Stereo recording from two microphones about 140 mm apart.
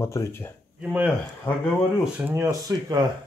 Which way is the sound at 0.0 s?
20° left (ahead or behind).